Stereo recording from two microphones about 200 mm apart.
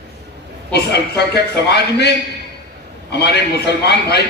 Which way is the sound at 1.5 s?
55° left (ahead or behind).